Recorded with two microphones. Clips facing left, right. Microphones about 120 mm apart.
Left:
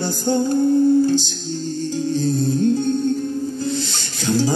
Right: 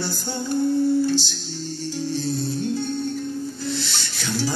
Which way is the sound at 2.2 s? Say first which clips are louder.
Left 6 dB; 45° left (ahead or behind).